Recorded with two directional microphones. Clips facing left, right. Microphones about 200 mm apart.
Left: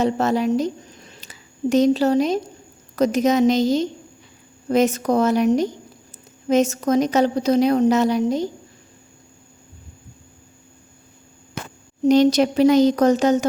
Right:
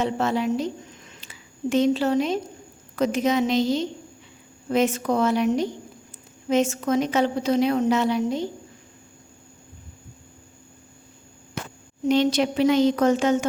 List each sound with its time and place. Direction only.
0.0 s a woman's voice: 40° left (ahead or behind)
12.0 s a woman's voice: 40° left (ahead or behind)